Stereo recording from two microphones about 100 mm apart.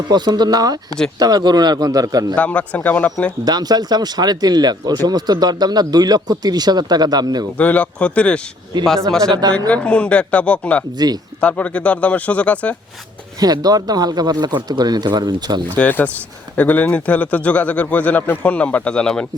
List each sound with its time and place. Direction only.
0.1 s a man's voice: 45° right (ahead or behind)
2.3 s a man's voice: 15° left (ahead or behind)
3.4 s speech: 40° right (ahead or behind)
7.6 s a man's voice: 15° left (ahead or behind)
8.7 s speech: 50° right (ahead or behind)
9.6 s a man's voice: 10° left (ahead or behind)
10.9 s speech: 45° right (ahead or behind)
11.3 s a man's voice: 15° left (ahead or behind)
13.4 s speech: 40° right (ahead or behind)
15.7 s a man's voice: 20° left (ahead or behind)